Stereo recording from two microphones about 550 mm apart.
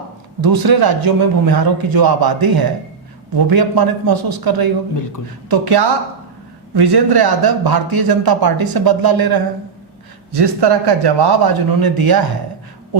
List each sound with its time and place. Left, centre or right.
0.4 s a man's voice: right